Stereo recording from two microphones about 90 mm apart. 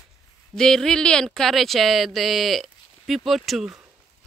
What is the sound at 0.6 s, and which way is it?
Speech, 5° left (ahead or behind).